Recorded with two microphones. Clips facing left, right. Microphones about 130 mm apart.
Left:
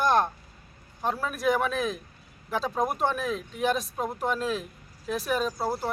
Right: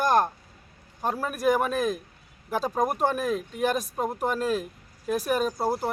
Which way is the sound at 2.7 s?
10° right (ahead or behind).